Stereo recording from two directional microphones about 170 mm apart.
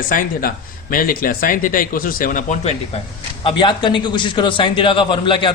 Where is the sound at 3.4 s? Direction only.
30° left (ahead or behind).